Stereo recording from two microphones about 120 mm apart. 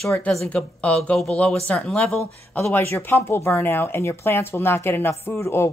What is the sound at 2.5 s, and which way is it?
Speech, 20° left (ahead or behind).